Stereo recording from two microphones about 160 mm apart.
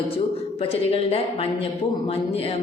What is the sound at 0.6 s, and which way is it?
Speech, 35° left (ahead or behind).